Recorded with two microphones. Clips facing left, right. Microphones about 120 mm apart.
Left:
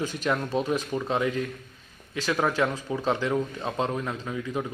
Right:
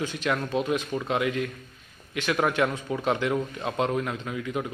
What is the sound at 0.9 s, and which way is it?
Speech, 25° left (ahead or behind).